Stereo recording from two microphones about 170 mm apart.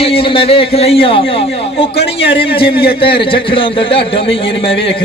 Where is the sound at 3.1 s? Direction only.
30° left (ahead or behind).